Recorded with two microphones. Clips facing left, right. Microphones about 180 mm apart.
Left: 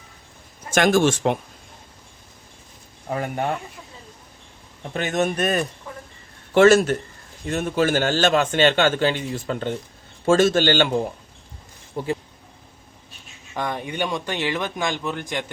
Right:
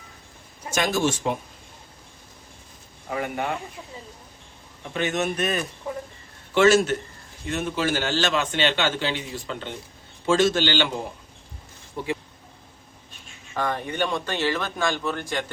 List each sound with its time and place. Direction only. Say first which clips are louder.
0.7 s a man's voice: left 6 dB; 50° left (ahead or behind); by 1.4 s 65° left (ahead or behind)
3.1 s speech: left 2 dB; 40° left (ahead or behind)
4.9 s a man's voice: left 3 dB; 40° left (ahead or behind)
13.5 s speech: even; 15° left (ahead or behind)